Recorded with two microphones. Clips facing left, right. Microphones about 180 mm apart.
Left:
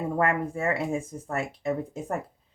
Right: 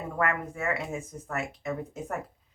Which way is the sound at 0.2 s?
30° left (ahead or behind).